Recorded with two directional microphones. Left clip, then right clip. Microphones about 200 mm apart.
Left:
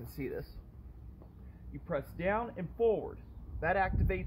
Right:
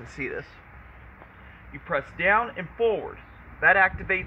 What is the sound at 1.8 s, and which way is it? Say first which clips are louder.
Speech: right 11 dB; 5° left (ahead or behind).